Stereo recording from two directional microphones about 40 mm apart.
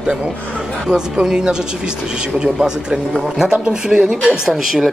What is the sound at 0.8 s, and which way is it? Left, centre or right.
Speech, centre.